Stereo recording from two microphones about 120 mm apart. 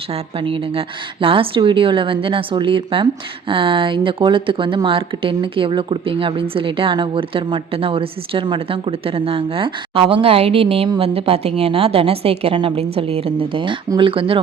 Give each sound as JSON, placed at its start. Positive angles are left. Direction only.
{"t": 0.1, "sound": "speech", "side_deg": -50}